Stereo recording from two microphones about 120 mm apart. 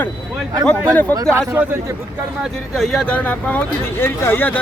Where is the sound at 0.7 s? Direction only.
25° right (ahead or behind).